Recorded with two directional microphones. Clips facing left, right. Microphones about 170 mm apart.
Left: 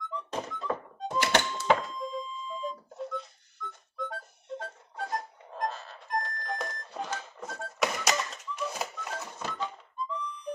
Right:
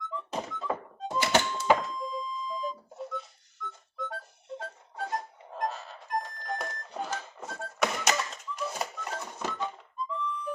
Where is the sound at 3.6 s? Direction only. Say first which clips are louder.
Left 1 dB; centre (ahead or behind).